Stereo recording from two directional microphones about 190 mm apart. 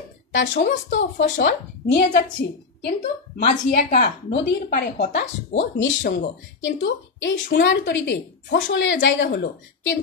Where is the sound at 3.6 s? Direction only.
50° left (ahead or behind).